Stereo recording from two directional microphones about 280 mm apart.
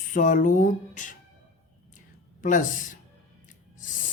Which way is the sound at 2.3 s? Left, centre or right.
Left.